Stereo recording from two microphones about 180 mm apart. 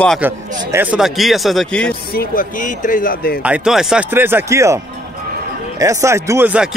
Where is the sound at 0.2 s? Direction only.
10° right (ahead or behind); by 2.0 s 5° left (ahead or behind).